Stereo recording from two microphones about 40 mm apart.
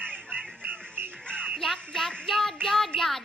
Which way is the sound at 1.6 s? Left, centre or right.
Centre.